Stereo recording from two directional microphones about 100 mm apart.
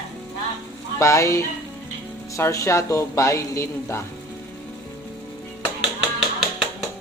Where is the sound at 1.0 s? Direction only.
30° left (ahead or behind).